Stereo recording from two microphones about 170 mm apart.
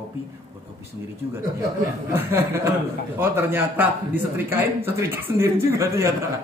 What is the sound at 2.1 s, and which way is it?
A man's voice, 15° right (ahead or behind).